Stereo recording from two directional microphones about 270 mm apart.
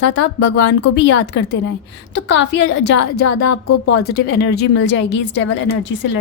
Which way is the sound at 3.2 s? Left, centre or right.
Left.